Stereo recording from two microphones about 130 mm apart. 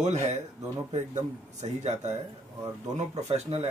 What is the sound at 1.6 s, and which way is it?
Speech, 60° right (ahead or behind).